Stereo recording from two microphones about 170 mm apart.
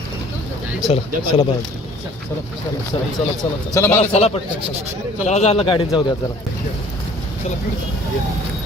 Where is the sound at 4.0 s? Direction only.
40° left (ahead or behind).